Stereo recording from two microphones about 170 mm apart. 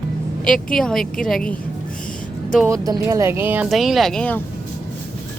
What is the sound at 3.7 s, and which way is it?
Speech, centre (ahead or behind).